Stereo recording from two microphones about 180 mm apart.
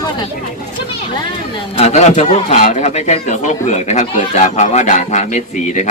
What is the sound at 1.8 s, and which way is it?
A man's voice, 40° left (ahead or behind).